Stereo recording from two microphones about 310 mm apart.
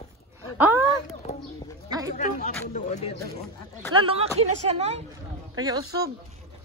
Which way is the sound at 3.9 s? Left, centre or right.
Centre.